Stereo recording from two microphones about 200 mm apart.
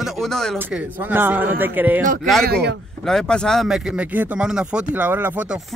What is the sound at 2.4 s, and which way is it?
Speech, 55° right (ahead or behind).